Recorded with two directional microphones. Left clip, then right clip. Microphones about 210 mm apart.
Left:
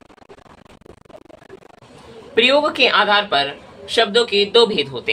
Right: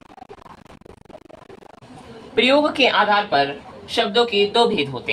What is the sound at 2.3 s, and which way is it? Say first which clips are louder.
Speech: left 2 dB; 25° left (ahead or behind).